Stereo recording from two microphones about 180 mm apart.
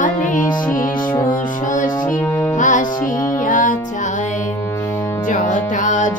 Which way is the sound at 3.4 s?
45° left (ahead or behind).